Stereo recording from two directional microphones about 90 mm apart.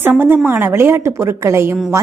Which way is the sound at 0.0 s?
25° right (ahead or behind).